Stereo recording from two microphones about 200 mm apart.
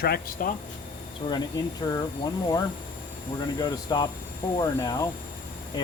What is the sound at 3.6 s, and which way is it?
Speech, 20° left (ahead or behind).